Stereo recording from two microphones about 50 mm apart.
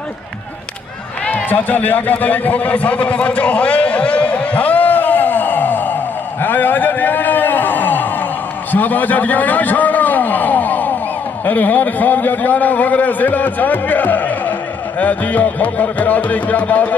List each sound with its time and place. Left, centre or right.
1.3 s a sound: left
6.4 s vehicle: left
11.4 s speech: left